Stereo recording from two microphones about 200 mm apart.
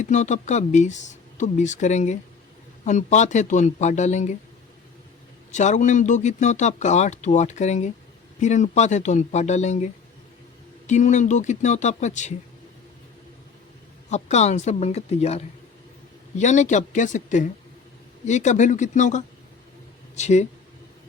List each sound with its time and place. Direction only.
0.0 s speech: 35° left (ahead or behind)
5.5 s speech: 35° left (ahead or behind)
14.1 s speech: 35° left (ahead or behind)